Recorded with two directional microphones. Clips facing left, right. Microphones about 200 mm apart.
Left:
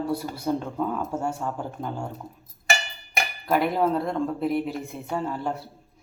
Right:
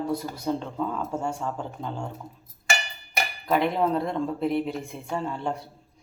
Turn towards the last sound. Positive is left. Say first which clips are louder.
# left 1 dB
turn(degrees=5)  # may be behind; listen again after turning